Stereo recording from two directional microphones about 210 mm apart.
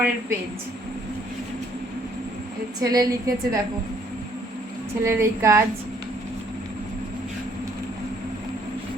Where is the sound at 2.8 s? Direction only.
15° right (ahead or behind).